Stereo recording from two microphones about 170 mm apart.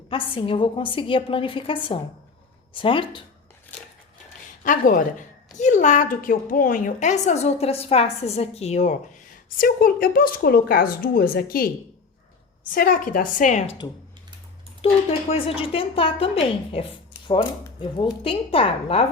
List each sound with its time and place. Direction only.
0.1 s a woman's voice: 30° left (ahead or behind)
4.6 s a woman's voice: 50° left (ahead or behind)
9.6 s speech: 60° left (ahead or behind)
12.7 s a woman's voice: 55° left (ahead or behind)
14.8 s a woman's voice: 35° left (ahead or behind)